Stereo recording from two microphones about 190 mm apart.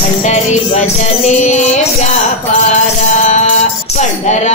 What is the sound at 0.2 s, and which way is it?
Music, 35° left (ahead or behind).